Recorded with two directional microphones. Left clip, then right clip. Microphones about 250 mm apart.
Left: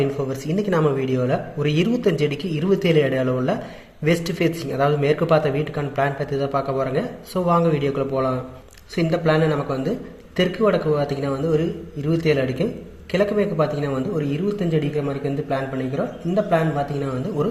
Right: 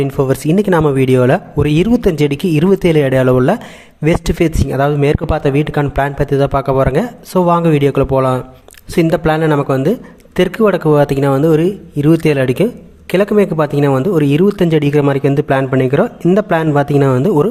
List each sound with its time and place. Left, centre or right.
0.0 s speech: right